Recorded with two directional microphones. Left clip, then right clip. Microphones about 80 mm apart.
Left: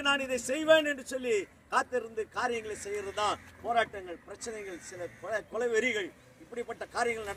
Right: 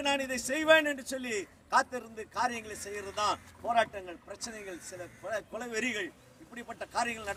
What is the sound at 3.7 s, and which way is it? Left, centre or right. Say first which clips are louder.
Speech: right 1 dB; right.